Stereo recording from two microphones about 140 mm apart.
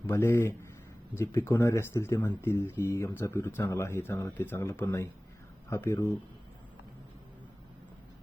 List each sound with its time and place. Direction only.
0.1 s speech: 15° left (ahead or behind)